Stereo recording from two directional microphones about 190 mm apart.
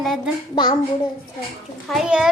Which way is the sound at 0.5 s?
25° left (ahead or behind).